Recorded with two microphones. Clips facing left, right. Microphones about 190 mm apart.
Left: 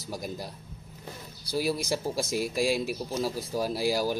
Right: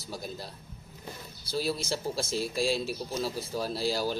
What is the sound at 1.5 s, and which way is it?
Speech, 15° left (ahead or behind).